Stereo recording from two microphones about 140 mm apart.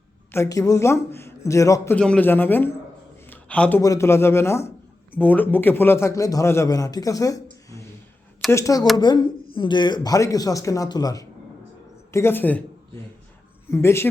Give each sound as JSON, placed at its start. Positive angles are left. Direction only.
{"t": 0.3, "sound": "a man's voice", "side_deg": 20}
{"t": 2.0, "sound": "a man's voice", "side_deg": 10}
{"t": 3.2, "sound": "a sound", "side_deg": 10}
{"t": 3.8, "sound": "a man's voice", "side_deg": 20}
{"t": 8.4, "sound": "a man's voice", "side_deg": 20}
{"t": 12.1, "sound": "a man's voice", "side_deg": 15}
{"t": 13.7, "sound": "a man's voice", "side_deg": 20}